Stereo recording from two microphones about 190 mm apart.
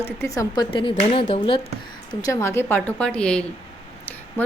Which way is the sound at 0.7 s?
30° left (ahead or behind).